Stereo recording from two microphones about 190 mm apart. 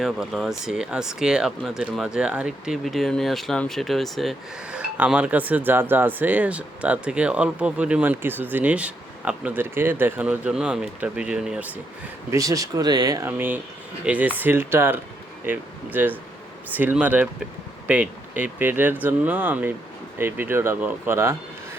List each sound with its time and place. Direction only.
0.0 s speech: centre (ahead or behind)
12.3 s speech: 15° right (ahead or behind)